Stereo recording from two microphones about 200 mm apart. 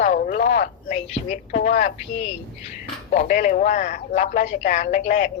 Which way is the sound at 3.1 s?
40° left (ahead or behind).